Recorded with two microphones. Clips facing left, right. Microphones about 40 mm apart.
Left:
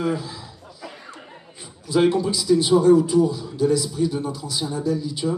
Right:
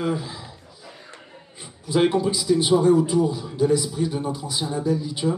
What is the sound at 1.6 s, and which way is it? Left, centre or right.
A man's voice, centre.